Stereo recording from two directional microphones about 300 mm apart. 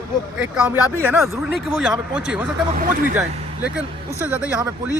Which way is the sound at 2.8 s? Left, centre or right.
Right.